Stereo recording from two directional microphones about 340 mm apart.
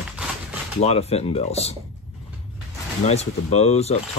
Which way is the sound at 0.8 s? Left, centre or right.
Centre.